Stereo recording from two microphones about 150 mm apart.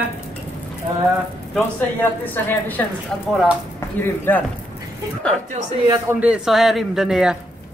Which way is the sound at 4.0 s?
10° left (ahead or behind).